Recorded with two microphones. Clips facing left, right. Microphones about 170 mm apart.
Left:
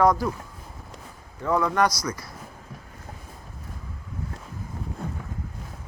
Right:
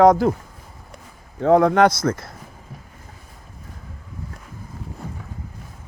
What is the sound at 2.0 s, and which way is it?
Speech, 55° right (ahead or behind).